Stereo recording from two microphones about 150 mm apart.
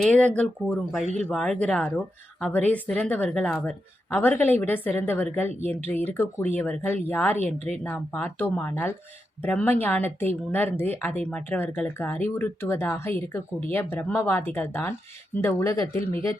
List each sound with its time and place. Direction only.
0.0 s speech: 5° left (ahead or behind)
1.0 s speech: 50° left (ahead or behind)
1.3 s speech: 5° left (ahead or behind)
7.4 s a woman's voice: 45° right (ahead or behind)
7.9 s speech: 10° left (ahead or behind)